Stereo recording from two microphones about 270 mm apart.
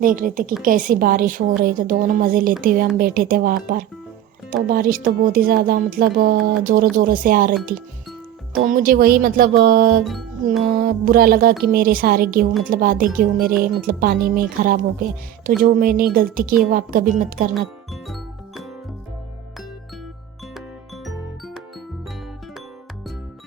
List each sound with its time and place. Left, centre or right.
0.0 s speech: right
8.6 s speech: right
10.0 s music: centre
10.7 s speech: right
18.1 s music: centre
20.5 s music: centre